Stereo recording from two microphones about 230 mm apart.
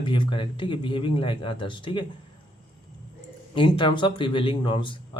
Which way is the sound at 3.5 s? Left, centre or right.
Left.